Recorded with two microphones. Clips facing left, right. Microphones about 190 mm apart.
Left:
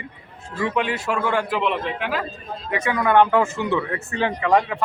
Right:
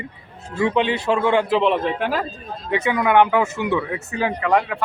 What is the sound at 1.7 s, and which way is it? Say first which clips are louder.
Speech: right 4 dB; 40° right (ahead or behind).